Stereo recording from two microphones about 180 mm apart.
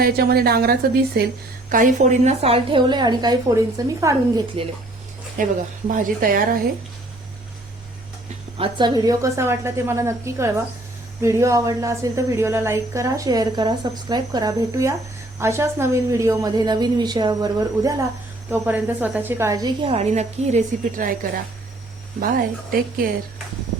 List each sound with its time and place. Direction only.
0.0 s speech: 60° right (ahead or behind)
1.7 s a woman's voice: 45° right (ahead or behind); by 4.4 s 20° right (ahead or behind)
5.4 s speech: 50° right (ahead or behind)
8.5 s a woman's voice: 25° right (ahead or behind)
18.5 s a woman's voice: 10° right (ahead or behind); by 23.0 s 55° right (ahead or behind)